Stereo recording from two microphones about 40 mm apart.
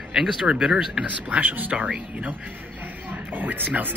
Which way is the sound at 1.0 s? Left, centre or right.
Right.